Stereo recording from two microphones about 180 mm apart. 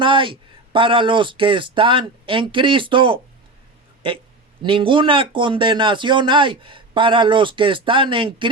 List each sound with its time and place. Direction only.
0.0 s a man's voice: 25° right (ahead or behind)